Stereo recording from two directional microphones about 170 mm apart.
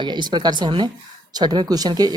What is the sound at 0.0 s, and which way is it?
Speech, 25° right (ahead or behind).